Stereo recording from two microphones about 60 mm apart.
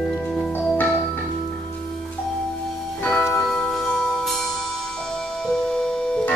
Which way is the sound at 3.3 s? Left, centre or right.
Centre.